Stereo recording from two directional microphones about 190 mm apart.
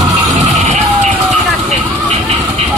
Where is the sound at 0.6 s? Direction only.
40° right (ahead or behind).